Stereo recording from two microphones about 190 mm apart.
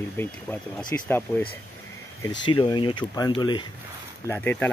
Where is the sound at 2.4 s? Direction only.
25° left (ahead or behind).